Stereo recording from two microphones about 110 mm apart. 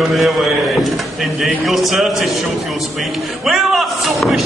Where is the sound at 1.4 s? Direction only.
Centre (ahead or behind).